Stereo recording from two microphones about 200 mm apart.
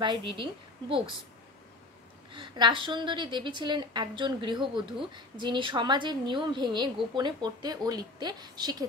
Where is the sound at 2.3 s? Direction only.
25° right (ahead or behind).